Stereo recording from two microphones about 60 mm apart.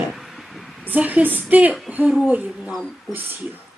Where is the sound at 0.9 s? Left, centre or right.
Right.